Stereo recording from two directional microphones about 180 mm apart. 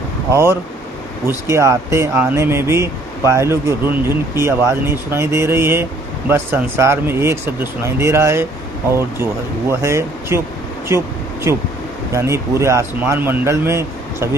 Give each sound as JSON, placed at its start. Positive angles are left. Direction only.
{"t": 0.3, "sound": "speech", "side_deg": -15}
{"t": 9.8, "sound": "speech", "side_deg": -15}